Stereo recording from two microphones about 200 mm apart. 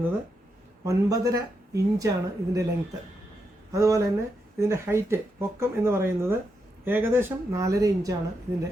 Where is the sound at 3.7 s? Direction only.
15° right (ahead or behind).